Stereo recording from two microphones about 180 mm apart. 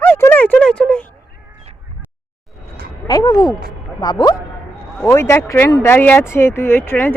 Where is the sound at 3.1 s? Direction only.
20° left (ahead or behind).